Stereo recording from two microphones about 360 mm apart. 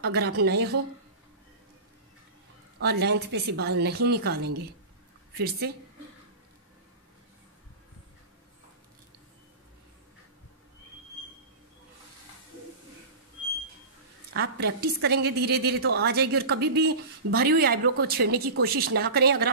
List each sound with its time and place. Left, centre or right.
0.0 s a woman's voice: right
2.8 s a woman's voice: right
14.3 s a woman's voice: right